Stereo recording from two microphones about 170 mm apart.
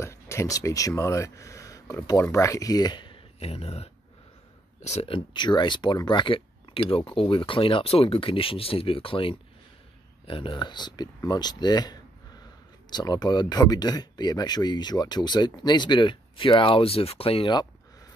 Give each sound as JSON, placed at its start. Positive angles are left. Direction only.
{"t": 0.0, "sound": "speech", "side_deg": 15}